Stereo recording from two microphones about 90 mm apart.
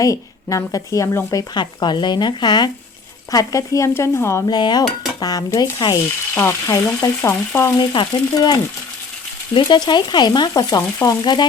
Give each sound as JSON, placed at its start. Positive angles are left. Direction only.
{"t": 0.0, "sound": "speech", "side_deg": 40}
{"t": 1.4, "sound": "speech", "side_deg": 55}
{"t": 3.3, "sound": "speech", "side_deg": 35}
{"t": 4.4, "sound": "speech", "side_deg": 50}
{"t": 6.3, "sound": "speech", "side_deg": 30}
{"t": 7.8, "sound": "speech", "side_deg": 55}
{"t": 9.6, "sound": "speech", "side_deg": 55}